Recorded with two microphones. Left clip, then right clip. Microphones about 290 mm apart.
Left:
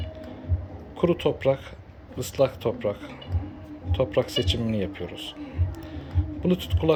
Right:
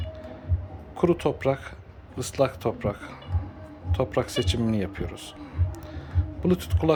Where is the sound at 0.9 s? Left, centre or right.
Centre.